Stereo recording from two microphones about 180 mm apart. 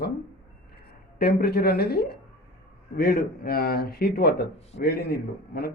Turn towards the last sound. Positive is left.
turn(degrees=60)  # may be behind; listen again after turning